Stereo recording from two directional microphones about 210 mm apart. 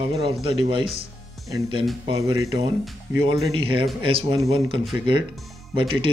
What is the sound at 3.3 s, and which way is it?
Speech, 25° right (ahead or behind).